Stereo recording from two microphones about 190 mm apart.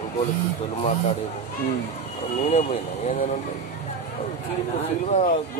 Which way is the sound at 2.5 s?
35° left (ahead or behind).